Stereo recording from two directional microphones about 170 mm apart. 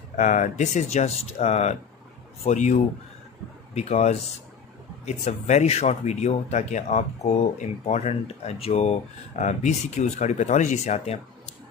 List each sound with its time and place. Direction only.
0.2 s speech: 45° left (ahead or behind)